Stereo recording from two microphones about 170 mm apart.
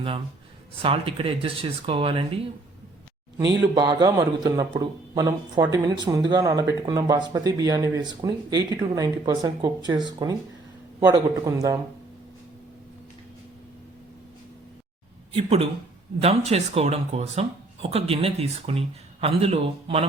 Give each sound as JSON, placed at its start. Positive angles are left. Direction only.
{"t": 0.8, "sound": "speech", "side_deg": -30}
{"t": 3.4, "sound": "speech", "side_deg": -90}
{"t": 3.8, "sound": "a man's voice", "side_deg": -25}
{"t": 15.3, "sound": "speech", "side_deg": -35}